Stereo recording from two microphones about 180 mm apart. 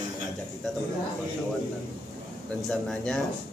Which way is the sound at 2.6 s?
5° left (ahead or behind).